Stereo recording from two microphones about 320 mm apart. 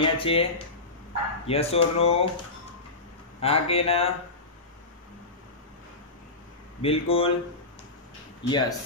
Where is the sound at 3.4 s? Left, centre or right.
Centre.